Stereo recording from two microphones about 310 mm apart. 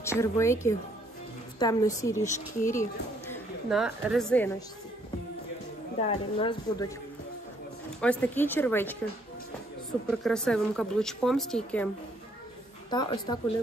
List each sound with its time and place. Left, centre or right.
0.0 s a woman's voice: centre
5.9 s a woman's voice: centre
8.0 s speech: centre
12.9 s a woman's voice: centre